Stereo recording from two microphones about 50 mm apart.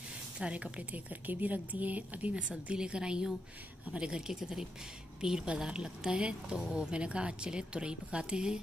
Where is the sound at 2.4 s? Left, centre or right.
Centre.